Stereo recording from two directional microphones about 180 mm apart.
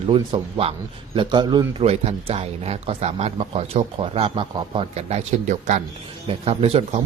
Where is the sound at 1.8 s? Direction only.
35° right (ahead or behind).